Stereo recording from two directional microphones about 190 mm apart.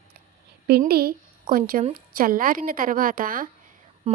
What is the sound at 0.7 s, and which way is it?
A woman's voice, 55° right (ahead or behind).